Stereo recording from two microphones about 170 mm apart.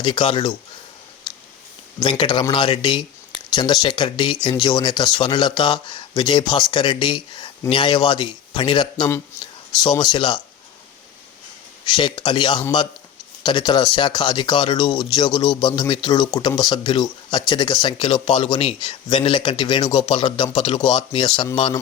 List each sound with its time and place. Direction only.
0.0 s speech: 30° left (ahead or behind)
2.0 s speech: 25° left (ahead or behind)
11.9 s speech: 30° left (ahead or behind)